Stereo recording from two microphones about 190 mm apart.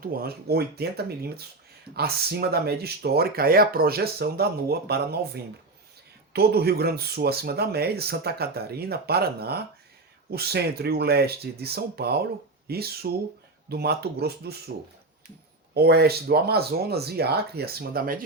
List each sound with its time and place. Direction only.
0.0 s speech: 50° right (ahead or behind)
15.7 s speech: 55° right (ahead or behind)